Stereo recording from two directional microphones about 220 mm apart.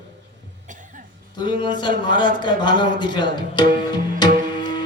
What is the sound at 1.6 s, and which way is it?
Speech, 20° left (ahead or behind).